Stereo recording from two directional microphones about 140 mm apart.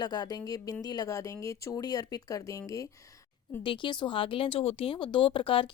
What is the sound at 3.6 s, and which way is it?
Speech, 35° left (ahead or behind).